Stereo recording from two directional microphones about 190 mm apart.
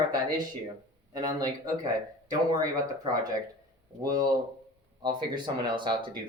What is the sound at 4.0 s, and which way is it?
Speech, 20° right (ahead or behind).